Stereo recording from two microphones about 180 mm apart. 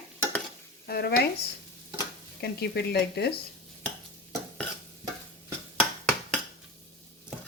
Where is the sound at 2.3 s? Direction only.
65° left (ahead or behind).